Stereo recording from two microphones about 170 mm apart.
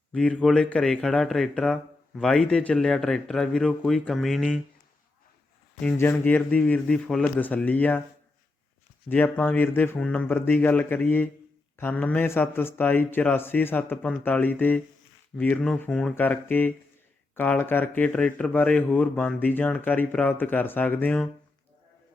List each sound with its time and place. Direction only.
0.1 s speech: 5° left (ahead or behind)
5.8 s speech: 10° left (ahead or behind)
9.0 s speech: 10° left (ahead or behind)